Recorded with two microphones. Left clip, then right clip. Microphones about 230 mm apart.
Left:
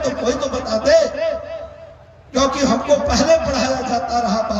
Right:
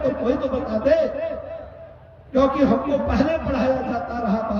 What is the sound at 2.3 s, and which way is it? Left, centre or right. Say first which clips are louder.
A man's voice: left 1 dB; left.